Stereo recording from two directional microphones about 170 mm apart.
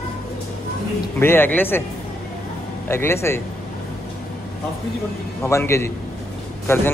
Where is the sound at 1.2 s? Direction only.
15° left (ahead or behind).